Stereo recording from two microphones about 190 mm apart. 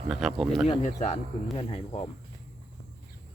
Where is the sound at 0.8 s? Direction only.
40° left (ahead or behind).